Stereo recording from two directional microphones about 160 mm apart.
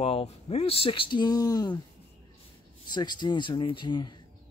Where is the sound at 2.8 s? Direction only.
25° left (ahead or behind).